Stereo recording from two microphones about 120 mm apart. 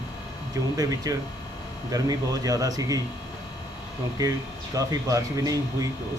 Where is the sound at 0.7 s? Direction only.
30° right (ahead or behind).